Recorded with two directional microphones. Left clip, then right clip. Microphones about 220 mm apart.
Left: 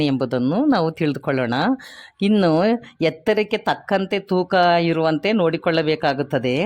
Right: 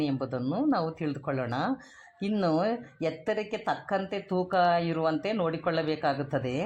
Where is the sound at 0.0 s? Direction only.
45° left (ahead or behind).